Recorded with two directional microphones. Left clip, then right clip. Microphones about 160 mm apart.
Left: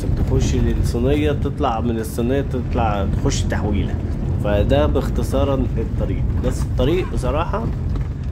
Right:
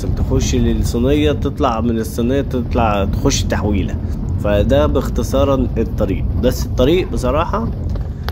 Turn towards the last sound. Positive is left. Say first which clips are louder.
# right 5 dB
turn(degrees=-20)  # may be behind; listen again after turning